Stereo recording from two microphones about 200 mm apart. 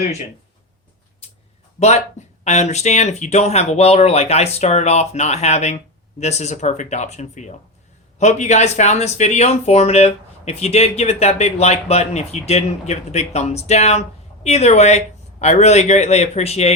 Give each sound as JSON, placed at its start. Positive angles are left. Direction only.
{"t": 1.8, "sound": "speech", "side_deg": 35}